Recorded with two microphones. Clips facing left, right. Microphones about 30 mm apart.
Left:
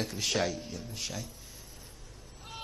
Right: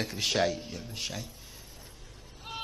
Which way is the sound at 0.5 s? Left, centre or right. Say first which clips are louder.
Right 2 dB; right.